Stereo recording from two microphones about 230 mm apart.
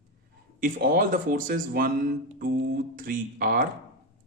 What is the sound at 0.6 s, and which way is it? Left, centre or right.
Speech, right.